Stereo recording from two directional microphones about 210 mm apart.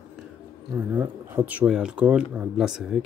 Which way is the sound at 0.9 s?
10° right (ahead or behind).